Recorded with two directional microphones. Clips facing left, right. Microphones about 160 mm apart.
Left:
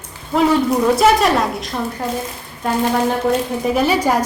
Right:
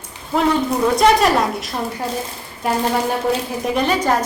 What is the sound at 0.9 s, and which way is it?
Speech, centre (ahead or behind).